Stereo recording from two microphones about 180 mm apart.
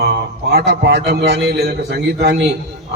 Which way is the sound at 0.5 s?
70° right (ahead or behind).